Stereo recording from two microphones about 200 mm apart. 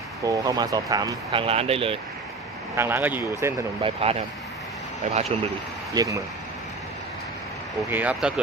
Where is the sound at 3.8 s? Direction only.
30° right (ahead or behind).